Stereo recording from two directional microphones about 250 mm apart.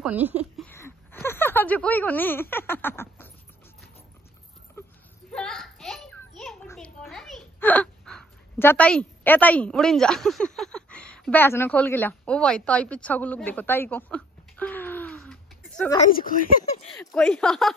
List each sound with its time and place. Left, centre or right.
0.0 s speech: centre
0.7 s speech: centre
5.3 s children playing: centre
16.0 s speech: left
17.1 s speech: centre